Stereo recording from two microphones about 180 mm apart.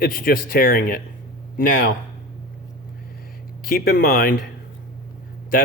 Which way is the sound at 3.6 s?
55° left (ahead or behind).